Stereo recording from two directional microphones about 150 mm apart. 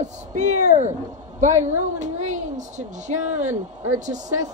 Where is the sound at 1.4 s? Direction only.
55° right (ahead or behind).